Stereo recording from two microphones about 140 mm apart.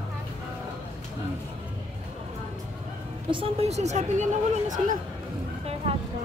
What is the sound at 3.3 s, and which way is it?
Speech, 45° right (ahead or behind).